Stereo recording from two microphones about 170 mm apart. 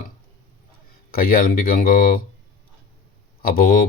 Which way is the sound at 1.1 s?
60° left (ahead or behind).